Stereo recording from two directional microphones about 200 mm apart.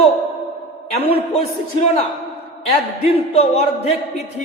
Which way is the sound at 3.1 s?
30° left (ahead or behind).